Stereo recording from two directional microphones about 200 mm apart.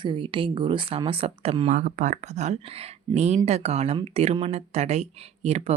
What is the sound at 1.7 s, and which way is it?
Speech, 40° right (ahead or behind).